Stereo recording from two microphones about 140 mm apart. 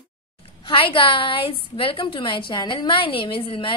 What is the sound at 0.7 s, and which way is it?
A woman's voice, 40° left (ahead or behind).